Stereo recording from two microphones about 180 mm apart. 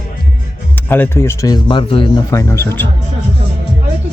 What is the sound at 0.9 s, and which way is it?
Speech, 10° left (ahead or behind).